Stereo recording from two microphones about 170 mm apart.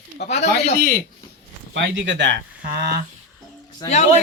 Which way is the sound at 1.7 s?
90° right.